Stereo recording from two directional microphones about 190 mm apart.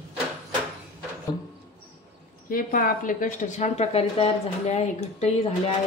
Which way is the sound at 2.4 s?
50° left (ahead or behind).